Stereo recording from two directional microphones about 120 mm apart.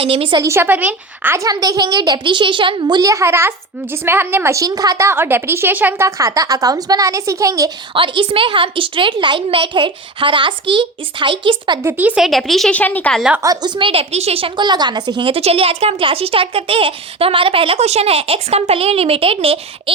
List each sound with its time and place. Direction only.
0.0 s a child's voice: 50° right (ahead or behind)
0.4 s a woman's voice: 20° right (ahead or behind)
1.5 s a child's voice: 30° right (ahead or behind); by 6.1 s 15° right (ahead or behind)
6.1 s a woman's voice: 25° right (ahead or behind)
7.9 s a child's voice: 45° right (ahead or behind)
11.8 s a woman's voice: 15° right (ahead or behind)
12.2 s a woman's voice: centre (ahead or behind)
13.4 s a child's voice: 35° right (ahead or behind)
15.3 s a child's voice: 55° right (ahead or behind)